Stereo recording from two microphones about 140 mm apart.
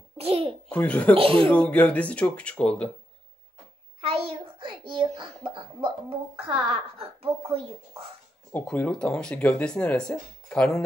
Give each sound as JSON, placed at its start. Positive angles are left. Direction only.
{"t": 0.2, "sound": "a child's voice", "side_deg": -45}
{"t": 0.7, "sound": "speech", "side_deg": 10}
{"t": 1.1, "sound": "a child's voice", "side_deg": -40}
{"t": 1.5, "sound": "speech", "side_deg": 10}
{"t": 4.0, "sound": "a child's voice", "side_deg": -40}
{"t": 8.6, "sound": "speech", "side_deg": 10}